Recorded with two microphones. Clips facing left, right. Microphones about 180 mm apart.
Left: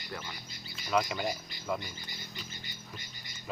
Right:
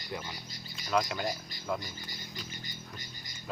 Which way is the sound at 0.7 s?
5° left (ahead or behind).